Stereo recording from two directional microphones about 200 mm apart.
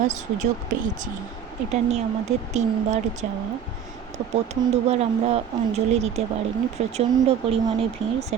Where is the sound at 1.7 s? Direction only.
35° right (ahead or behind).